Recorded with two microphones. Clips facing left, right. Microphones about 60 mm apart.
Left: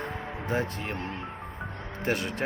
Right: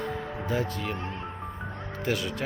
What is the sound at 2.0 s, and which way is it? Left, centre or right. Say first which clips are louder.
Speech: left 1 dB; left.